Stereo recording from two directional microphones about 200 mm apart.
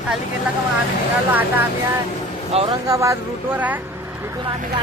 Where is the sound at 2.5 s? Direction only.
30° right (ahead or behind).